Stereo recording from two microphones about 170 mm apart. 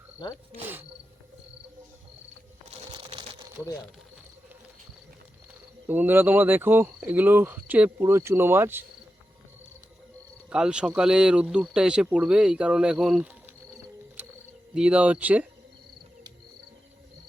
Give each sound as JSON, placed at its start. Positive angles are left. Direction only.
{"t": 0.2, "sound": "speech", "side_deg": 25}
{"t": 0.5, "sound": "speech", "side_deg": -10}
{"t": 2.6, "sound": "typewriter", "side_deg": -35}
{"t": 5.9, "sound": "speech", "side_deg": -10}
{"t": 10.5, "sound": "speech", "side_deg": -5}
{"t": 14.2, "sound": "cricket", "side_deg": -10}
{"t": 14.8, "sound": "speech", "side_deg": -5}